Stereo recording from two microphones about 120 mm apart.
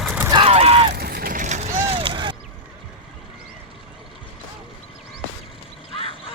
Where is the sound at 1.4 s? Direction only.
90° right; by 2.0 s 65° right (ahead or behind).